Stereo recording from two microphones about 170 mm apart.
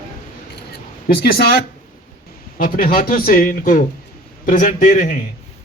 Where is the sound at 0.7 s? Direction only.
60° left (ahead or behind).